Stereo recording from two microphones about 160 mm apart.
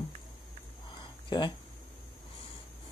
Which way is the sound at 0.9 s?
30° left (ahead or behind).